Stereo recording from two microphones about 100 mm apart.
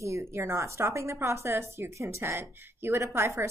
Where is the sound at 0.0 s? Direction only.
30° right (ahead or behind).